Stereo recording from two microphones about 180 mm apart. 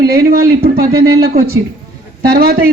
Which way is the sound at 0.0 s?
60° right (ahead or behind).